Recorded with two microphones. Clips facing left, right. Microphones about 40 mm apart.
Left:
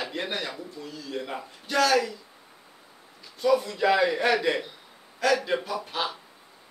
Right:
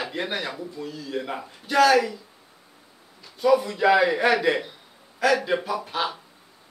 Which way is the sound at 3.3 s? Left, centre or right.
Centre.